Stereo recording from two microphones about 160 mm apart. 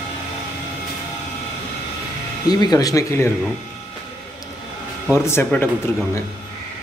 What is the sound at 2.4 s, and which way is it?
Speech, 25° left (ahead or behind).